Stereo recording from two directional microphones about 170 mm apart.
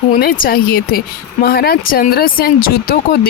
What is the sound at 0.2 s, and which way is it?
Speech, 55° left (ahead or behind).